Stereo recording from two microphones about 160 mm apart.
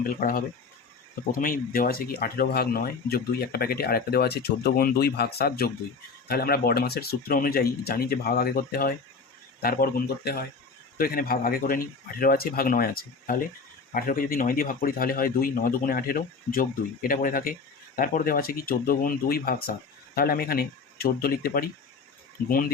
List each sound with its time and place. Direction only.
0.2 s a man's voice: 65° left (ahead or behind)